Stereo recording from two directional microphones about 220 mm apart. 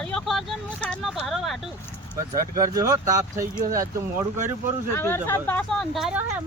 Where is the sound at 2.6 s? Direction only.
15° right (ahead or behind).